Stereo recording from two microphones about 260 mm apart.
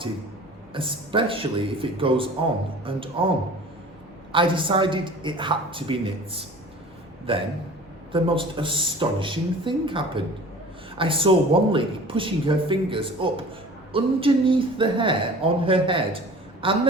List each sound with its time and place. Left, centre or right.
0.7 s speech: centre
4.3 s speech: centre